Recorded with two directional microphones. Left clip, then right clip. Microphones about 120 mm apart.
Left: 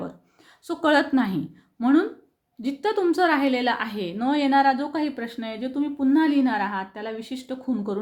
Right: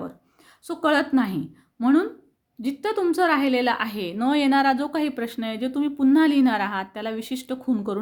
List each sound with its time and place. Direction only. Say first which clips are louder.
0.7 s a woman's voice: left 1 dB; 25° right (ahead or behind); by 7.9 s 50° right (ahead or behind)